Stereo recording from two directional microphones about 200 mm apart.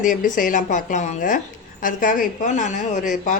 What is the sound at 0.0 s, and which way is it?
A woman's voice, 40° left (ahead or behind).